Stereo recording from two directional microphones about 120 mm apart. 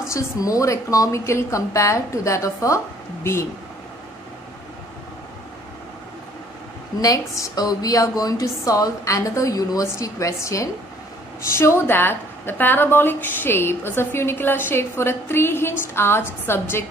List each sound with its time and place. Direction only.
0.1 s speech: 30° left (ahead or behind)
7.0 s speech: 30° left (ahead or behind)